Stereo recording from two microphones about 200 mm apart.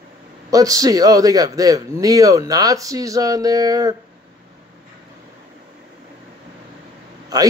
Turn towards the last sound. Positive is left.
turn(degrees=-20)  # may be behind; listen again after turning